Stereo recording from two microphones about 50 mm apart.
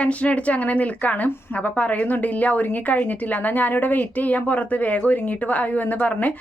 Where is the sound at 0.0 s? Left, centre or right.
Left.